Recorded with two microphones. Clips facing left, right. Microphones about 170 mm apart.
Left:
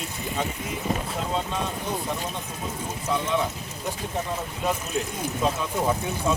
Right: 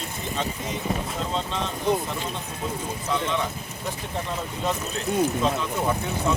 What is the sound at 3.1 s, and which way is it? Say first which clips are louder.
Speech: left 1 dB; 10° left (ahead or behind).